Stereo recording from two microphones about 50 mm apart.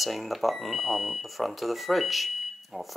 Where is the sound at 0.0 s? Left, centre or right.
Centre.